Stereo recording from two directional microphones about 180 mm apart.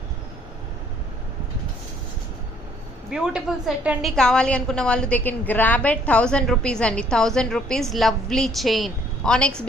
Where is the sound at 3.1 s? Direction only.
5° right (ahead or behind).